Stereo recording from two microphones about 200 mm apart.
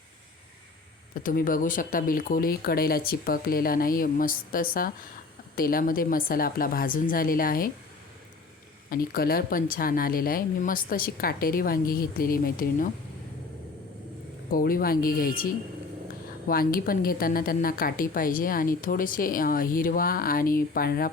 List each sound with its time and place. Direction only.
1.1 s a woman's voice: 45° left (ahead or behind)
8.9 s a woman's voice: 50° left (ahead or behind)
14.5 s a woman's voice: 45° left (ahead or behind)